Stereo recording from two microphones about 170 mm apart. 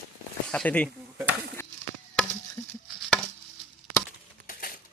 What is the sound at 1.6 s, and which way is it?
Chop, 15° left (ahead or behind).